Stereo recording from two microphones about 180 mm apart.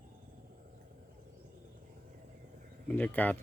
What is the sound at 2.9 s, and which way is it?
Speech, 10° left (ahead or behind).